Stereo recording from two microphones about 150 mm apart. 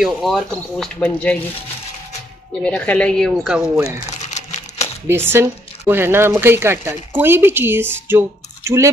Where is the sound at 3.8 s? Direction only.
45° left (ahead or behind).